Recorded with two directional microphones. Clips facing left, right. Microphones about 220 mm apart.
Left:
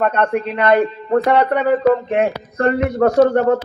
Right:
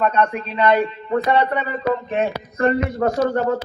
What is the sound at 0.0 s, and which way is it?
A man's voice, 55° left (ahead or behind).